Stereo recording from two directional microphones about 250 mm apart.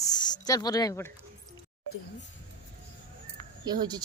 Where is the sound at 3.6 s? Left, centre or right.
Centre.